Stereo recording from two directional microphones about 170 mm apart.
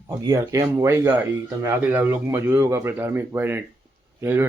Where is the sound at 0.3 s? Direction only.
20° right (ahead or behind).